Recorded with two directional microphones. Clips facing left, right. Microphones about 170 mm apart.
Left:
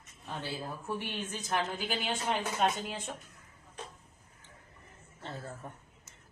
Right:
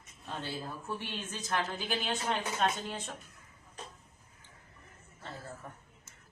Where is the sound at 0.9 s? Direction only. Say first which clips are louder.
Left 3 dB; 15° left (ahead or behind).